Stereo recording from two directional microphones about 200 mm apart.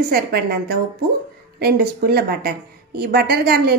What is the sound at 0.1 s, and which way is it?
Speech, 50° right (ahead or behind).